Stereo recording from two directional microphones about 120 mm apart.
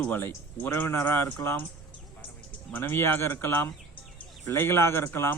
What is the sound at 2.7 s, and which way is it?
A man's voice, 20° left (ahead or behind).